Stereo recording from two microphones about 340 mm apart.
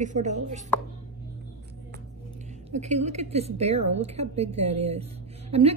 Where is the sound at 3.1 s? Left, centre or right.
Centre.